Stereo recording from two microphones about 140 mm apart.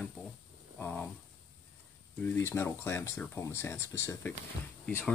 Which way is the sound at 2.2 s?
20° left (ahead or behind).